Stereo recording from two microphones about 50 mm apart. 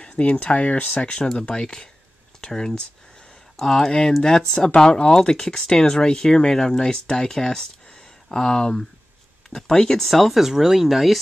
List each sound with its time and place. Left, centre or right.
0.0 s speech: left; by 11.1 s centre